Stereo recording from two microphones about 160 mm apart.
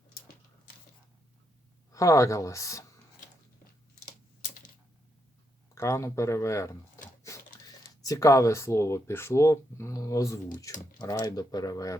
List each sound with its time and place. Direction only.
1.9 s speech: 20° left (ahead or behind)
5.7 s speech: 20° left (ahead or behind)
7.3 s a sound: 20° left (ahead or behind)
8.0 s speech: 20° left (ahead or behind)